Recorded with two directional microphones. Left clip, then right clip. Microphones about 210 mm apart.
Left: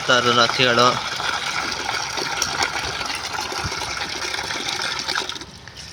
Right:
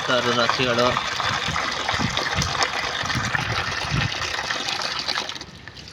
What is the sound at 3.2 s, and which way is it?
Water, 15° right (ahead or behind).